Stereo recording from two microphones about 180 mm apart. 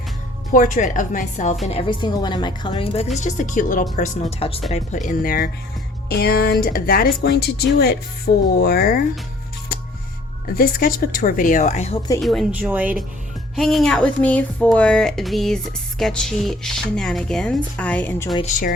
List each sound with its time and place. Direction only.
0.5 s speech: 45° left (ahead or behind)
1.6 s speech: 30° left (ahead or behind)
3.2 s speech: 45° left (ahead or behind)
4.7 s speech: 40° left (ahead or behind)
6.1 s speech: 60° left (ahead or behind)
10.5 s speech: 55° left (ahead or behind)
12.2 s speech: centre (ahead or behind)